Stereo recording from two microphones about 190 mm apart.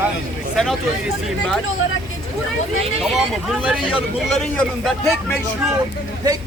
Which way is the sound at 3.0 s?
Centre (ahead or behind).